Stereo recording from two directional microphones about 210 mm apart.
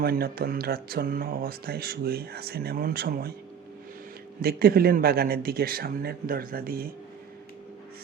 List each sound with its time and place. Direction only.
0.0 s speech: 45° right (ahead or behind)
4.4 s speech: 45° right (ahead or behind)